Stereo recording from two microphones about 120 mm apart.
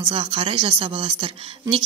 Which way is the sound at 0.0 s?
50° right (ahead or behind).